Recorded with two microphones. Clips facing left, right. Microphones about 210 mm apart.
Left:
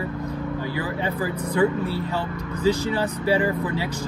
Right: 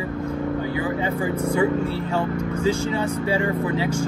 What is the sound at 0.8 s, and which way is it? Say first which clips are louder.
Speech: right 3 dB; 30° right (ahead or behind).